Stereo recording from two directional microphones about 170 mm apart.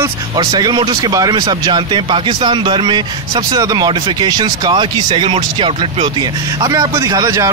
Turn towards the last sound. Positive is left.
turn(degrees=-20)  # may be behind; listen again after turning